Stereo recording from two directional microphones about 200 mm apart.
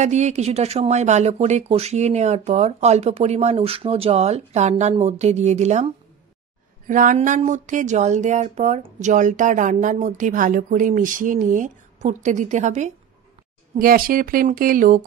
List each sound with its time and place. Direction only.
0.0 s speech: 35° right (ahead or behind)
6.9 s speech: 40° right (ahead or behind)